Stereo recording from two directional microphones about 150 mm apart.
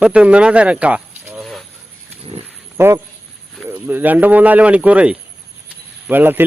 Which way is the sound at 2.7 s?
15° right (ahead or behind).